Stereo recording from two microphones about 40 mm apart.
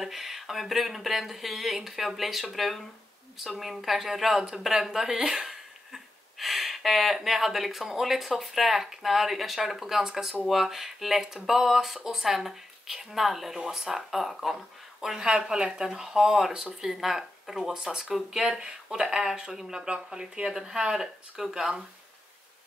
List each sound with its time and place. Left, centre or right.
0.0 s speech: centre
15.0 s speech: centre
17.8 s speech: centre